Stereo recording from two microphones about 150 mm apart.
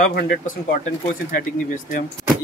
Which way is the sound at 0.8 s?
65° left (ahead or behind).